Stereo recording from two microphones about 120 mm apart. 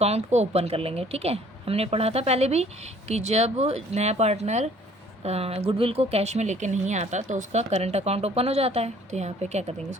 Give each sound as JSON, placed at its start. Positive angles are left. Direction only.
{"t": 0.0, "sound": "speech", "side_deg": -65}
{"t": 5.2, "sound": "speech", "side_deg": -60}